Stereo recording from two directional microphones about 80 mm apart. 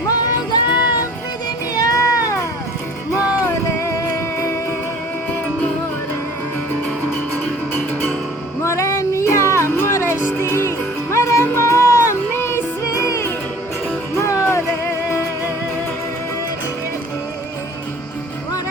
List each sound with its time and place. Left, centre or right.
0.1 s music: left
3.2 s music: right
3.4 s music: left
7.7 s music: left
8.6 s music: left
14.2 s a sound: left